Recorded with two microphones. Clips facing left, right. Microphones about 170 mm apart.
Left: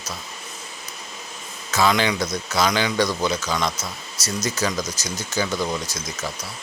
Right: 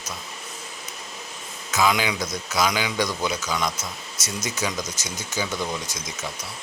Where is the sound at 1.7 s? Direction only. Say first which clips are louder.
Left 2 dB; 10° right (ahead or behind).